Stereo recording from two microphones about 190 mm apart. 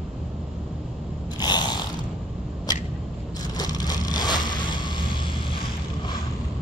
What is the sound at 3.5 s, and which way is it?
Scrape, 20° left (ahead or behind).